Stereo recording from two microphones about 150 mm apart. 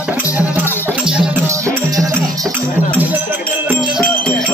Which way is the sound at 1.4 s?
20° right (ahead or behind).